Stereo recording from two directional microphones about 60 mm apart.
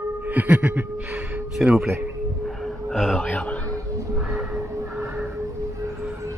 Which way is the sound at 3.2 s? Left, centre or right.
Left.